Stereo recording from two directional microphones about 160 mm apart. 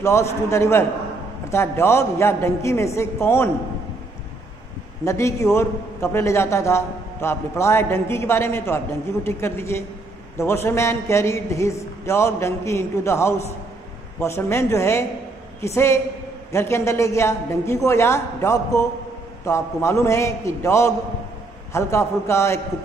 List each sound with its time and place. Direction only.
0.0 s a man's voice: 15° left (ahead or behind)
5.0 s a man's voice: 15° left (ahead or behind)